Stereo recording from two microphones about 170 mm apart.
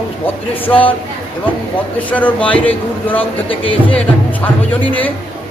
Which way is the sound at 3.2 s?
30° left (ahead or behind).